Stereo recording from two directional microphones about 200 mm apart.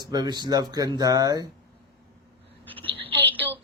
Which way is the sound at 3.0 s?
10° left (ahead or behind).